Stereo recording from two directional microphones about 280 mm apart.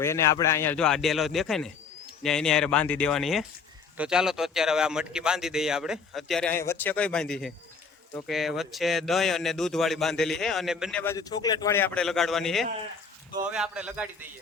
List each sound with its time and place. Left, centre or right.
0.0 s speech: centre